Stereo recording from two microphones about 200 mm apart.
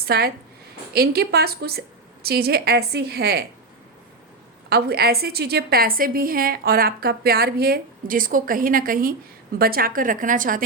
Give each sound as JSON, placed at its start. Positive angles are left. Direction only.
{"t": 0.0, "sound": "a woman's voice", "side_deg": -50}
{"t": 4.7, "sound": "a woman's voice", "side_deg": -50}